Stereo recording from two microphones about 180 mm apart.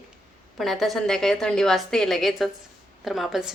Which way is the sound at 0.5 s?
Centre (ahead or behind).